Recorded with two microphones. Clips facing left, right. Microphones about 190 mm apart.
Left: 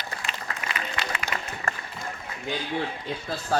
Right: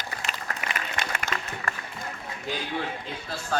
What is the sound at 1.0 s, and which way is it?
Music, 50° right (ahead or behind).